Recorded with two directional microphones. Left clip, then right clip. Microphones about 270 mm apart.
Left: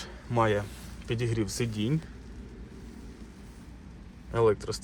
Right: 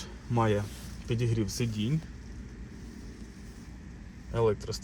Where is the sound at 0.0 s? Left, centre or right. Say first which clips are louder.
Left 3 dB; centre.